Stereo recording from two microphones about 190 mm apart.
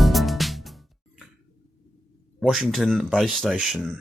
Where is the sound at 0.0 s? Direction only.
Centre (ahead or behind).